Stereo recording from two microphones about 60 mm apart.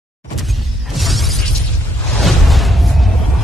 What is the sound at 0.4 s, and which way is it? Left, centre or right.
Shatter, centre.